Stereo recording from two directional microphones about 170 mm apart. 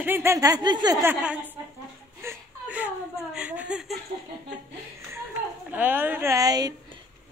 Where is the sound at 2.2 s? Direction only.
10° right (ahead or behind).